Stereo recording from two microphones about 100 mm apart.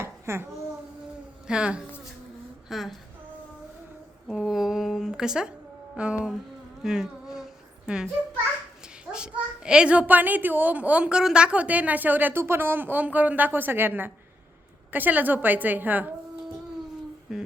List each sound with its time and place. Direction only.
0.0 s babbling: 25° right (ahead or behind)
1.5 s a child's voice: 10° right (ahead or behind)
2.6 s a sound: centre (ahead or behind)
4.3 s a child's voice: 5° right (ahead or behind)
6.8 s a sound: 5° right (ahead or behind)
9.1 s a child's voice: 10° right (ahead or behind)
17.3 s speech: 5° right (ahead or behind)